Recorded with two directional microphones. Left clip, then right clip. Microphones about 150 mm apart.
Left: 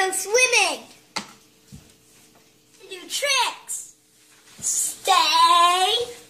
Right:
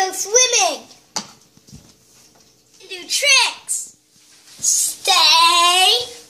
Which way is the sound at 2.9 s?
Centre (ahead or behind).